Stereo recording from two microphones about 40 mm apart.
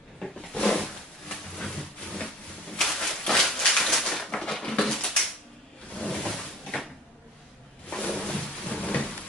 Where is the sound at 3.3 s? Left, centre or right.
Centre.